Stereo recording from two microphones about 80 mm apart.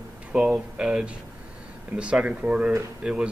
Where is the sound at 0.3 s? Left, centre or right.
Centre.